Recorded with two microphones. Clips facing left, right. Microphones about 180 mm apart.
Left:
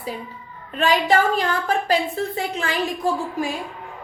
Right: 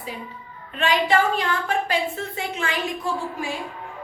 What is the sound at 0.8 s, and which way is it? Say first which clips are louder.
A woman's voice: left 2 dB; 40° left (ahead or behind).